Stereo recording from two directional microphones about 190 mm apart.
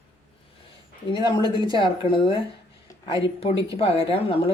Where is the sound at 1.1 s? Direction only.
25° left (ahead or behind).